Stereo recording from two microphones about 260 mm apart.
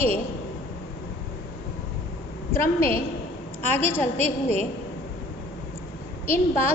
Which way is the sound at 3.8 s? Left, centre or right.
Centre.